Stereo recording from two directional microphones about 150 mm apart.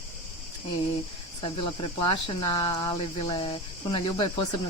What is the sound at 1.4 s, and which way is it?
Speech, 35° left (ahead or behind).